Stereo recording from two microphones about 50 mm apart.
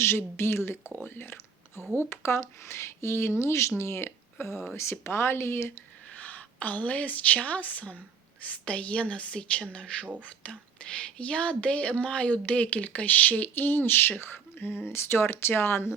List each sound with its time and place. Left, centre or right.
0.0 s speech: left
1.0 s whispering: left
2.0 s speech: left
6.1 s a woman's voice: left